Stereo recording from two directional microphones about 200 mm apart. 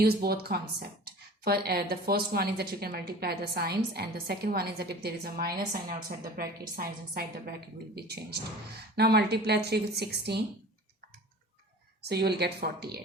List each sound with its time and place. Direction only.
0.0 s a woman's voice: 50° right (ahead or behind)
12.0 s speech: 55° right (ahead or behind)